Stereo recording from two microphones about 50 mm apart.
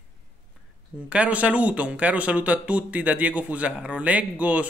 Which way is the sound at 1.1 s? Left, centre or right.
Right.